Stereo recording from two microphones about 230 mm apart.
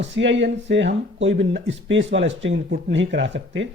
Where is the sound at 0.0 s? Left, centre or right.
Right.